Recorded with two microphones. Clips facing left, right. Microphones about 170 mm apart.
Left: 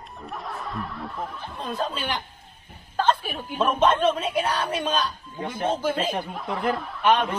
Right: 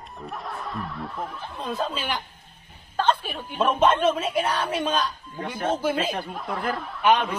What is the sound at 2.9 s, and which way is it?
Chuckle, 5° left (ahead or behind).